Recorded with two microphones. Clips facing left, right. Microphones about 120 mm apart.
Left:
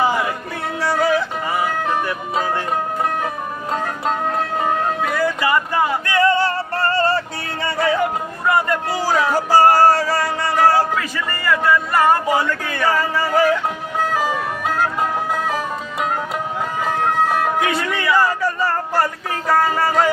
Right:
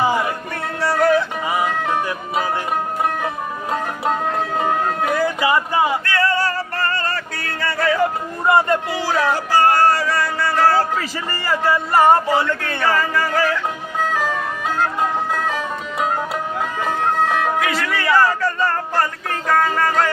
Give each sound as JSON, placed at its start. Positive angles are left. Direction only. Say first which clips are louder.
{"t": 0.8, "sound": "music", "louder": "right 2 dB", "side_deg": 0}
{"t": 2.0, "sound": "speech", "louder": "even", "side_deg": -10}
{"t": 5.1, "sound": "a sound", "louder": "right 1 dB", "side_deg": -20}
{"t": 6.1, "sound": "music", "louder": "left 3 dB", "side_deg": 20}
{"t": 8.4, "sound": "speech", "louder": "right 3 dB", "side_deg": -25}
{"t": 8.9, "sound": "music", "louder": "left 1 dB", "side_deg": 40}
{"t": 10.3, "sound": "music", "louder": "left 1 dB", "side_deg": 15}
{"t": 10.9, "sound": "music", "louder": "left 1 dB", "side_deg": -30}
{"t": 12.8, "sound": "a sound", "louder": "left 1 dB", "side_deg": 10}
{"t": 14.1, "sound": "music", "louder": "left 1 dB", "side_deg": 10}
{"t": 16.8, "sound": "music", "louder": "left 1 dB", "side_deg": 5}
{"t": 17.6, "sound": "music", "louder": "left 1 dB", "side_deg": 25}